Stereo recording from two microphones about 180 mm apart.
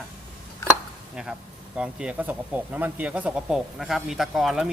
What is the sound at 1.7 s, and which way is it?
Speech, 5° right (ahead or behind).